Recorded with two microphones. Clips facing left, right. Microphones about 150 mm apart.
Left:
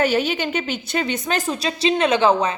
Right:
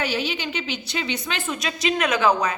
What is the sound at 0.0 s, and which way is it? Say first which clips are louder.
A woman's voice: left 6 dB; 50° left (ahead or behind).